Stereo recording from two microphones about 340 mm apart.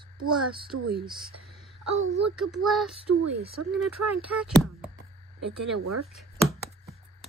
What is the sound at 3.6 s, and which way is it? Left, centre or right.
Speech, right.